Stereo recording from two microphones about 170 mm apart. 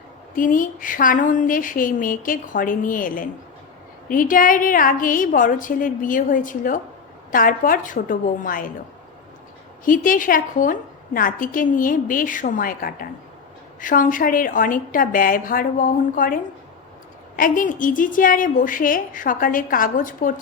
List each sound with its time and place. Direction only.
0.3 s a woman's voice: 50° left (ahead or behind)
9.8 s a woman's voice: 55° left (ahead or behind)